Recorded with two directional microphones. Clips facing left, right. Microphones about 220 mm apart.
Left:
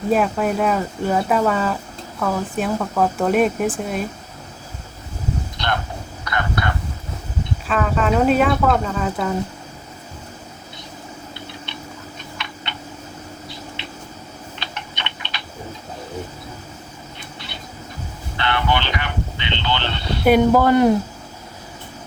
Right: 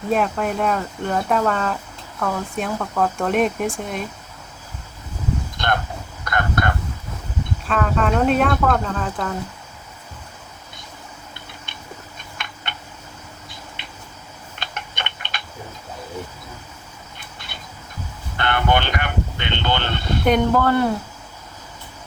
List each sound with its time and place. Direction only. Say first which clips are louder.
0.1 s speech: left 2 dB; centre (ahead or behind)
5.5 s vehicle: right 2 dB; 50° right (ahead or behind)
6.2 s fowl: right 2 dB; 50° right (ahead or behind)
7.7 s speech: left 1 dB; centre (ahead or behind)
12.4 s tick-tock: left 1 dB; 50° right (ahead or behind)
13.8 s a sound: left 6 dB; 50° right (ahead or behind)
14.6 s tick-tock: right 2 dB; 50° right (ahead or behind)
18.3 s vehicle: right 1 dB; 50° right (ahead or behind)
20.2 s speech: left 4 dB; 10° left (ahead or behind)